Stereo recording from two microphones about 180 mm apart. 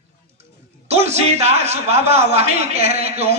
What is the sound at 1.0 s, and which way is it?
A man's voice, 35° right (ahead or behind).